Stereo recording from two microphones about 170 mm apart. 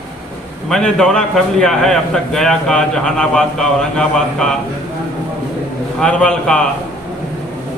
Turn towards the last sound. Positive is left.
turn(degrees=5)  # may be behind; listen again after turning